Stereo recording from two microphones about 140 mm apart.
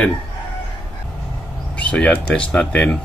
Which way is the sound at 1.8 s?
10° left (ahead or behind).